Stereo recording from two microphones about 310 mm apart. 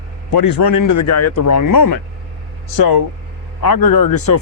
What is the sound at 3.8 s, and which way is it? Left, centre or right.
Speech, left.